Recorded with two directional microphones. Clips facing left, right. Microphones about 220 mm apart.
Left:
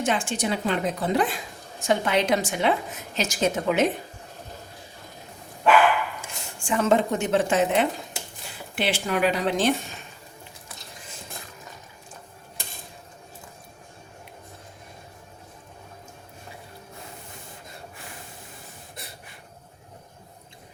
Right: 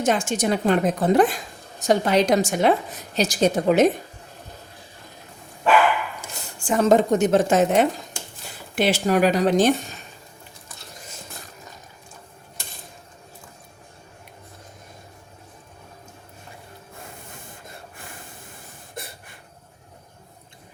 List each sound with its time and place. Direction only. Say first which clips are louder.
0.0 s a woman's voice: right 4 dB; 45° right (ahead or behind)
6.2 s a woman's voice: right 4 dB; 40° right (ahead or behind)
19.0 s a sound: right 7 dB; 50° right (ahead or behind)